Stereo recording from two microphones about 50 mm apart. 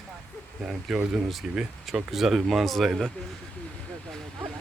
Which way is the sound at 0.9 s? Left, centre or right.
Centre.